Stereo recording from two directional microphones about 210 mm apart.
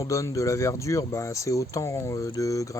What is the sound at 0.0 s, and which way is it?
Speech, 15° left (ahead or behind).